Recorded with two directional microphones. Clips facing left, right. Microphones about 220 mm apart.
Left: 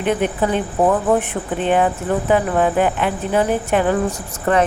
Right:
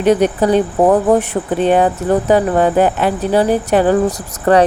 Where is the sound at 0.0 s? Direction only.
40° right (ahead or behind).